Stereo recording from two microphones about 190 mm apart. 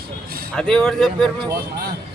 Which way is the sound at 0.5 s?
5° left (ahead or behind).